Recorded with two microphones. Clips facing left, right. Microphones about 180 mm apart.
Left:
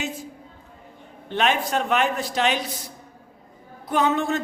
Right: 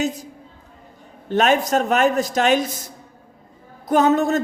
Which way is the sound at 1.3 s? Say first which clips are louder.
Right 5 dB; 45° right (ahead or behind).